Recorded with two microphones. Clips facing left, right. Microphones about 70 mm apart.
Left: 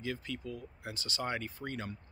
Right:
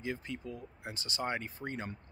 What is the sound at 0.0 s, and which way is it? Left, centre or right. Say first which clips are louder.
Speech: even; right.